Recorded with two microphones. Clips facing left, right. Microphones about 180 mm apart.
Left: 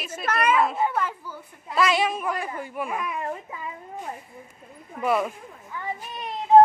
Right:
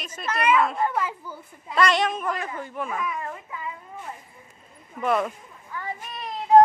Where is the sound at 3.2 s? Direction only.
30° left (ahead or behind).